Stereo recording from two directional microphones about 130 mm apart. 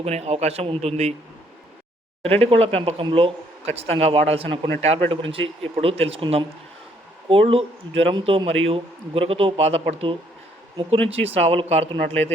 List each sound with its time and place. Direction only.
0.0 s speech: 55° right (ahead or behind)
2.2 s speech: 50° right (ahead or behind)